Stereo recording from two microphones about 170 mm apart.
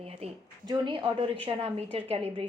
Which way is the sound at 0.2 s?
35° right (ahead or behind).